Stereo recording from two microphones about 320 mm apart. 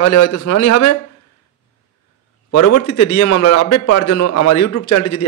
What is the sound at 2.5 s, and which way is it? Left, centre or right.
A man's voice, left.